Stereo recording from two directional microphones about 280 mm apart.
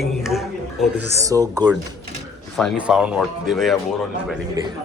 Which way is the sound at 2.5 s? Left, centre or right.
Centre.